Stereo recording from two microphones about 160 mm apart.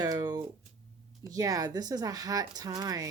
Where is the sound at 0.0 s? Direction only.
25° right (ahead or behind).